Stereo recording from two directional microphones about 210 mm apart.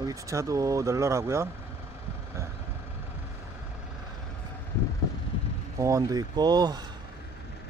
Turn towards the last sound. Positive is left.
turn(degrees=-20)  # may be behind; listen again after turning